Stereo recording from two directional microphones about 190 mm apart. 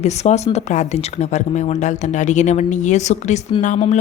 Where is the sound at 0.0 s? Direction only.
35° left (ahead or behind).